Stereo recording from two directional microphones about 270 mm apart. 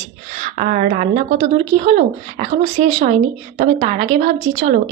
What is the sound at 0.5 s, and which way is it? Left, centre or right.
A woman's voice, right.